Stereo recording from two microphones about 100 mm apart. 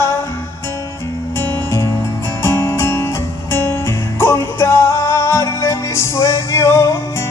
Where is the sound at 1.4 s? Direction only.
25° left (ahead or behind).